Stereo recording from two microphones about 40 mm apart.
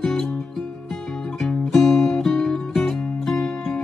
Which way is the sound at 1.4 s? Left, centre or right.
Centre.